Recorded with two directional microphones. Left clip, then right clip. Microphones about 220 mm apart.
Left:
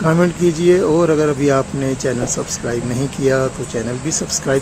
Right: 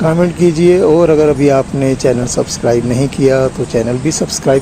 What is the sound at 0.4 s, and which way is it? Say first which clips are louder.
Speech: right 6 dB; 25° right (ahead or behind).